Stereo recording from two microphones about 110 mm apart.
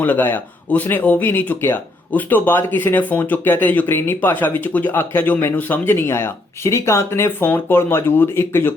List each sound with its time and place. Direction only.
0.0 s speech: 15° left (ahead or behind)